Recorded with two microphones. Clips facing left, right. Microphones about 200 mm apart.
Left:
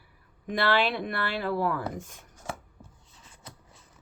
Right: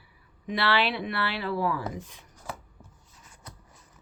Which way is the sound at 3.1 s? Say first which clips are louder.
Right 1 dB; 25° left (ahead or behind).